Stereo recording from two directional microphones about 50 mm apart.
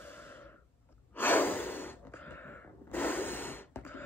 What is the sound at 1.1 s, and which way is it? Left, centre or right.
Gasp, left.